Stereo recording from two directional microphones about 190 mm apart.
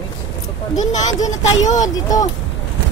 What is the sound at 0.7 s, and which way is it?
Speech, 40° left (ahead or behind).